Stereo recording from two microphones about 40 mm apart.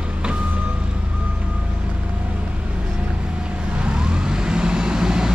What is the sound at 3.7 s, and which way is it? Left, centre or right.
Vehicle, right.